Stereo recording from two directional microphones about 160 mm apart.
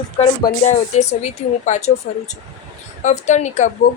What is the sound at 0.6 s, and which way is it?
A woman's voice, 45° left (ahead or behind).